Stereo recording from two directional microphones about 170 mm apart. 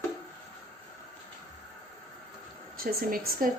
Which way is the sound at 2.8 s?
60° right (ahead or behind).